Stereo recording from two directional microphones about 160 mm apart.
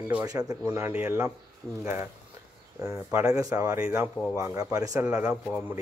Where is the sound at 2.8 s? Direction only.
15° right (ahead or behind).